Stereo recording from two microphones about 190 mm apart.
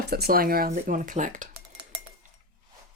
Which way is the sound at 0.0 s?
55° right (ahead or behind).